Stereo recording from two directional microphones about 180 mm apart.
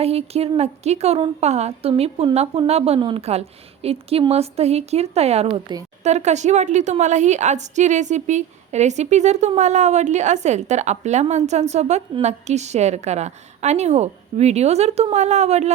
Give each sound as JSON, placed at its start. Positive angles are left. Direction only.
{"t": 0.0, "sound": "speech", "side_deg": -35}
{"t": 6.0, "sound": "speech", "side_deg": -40}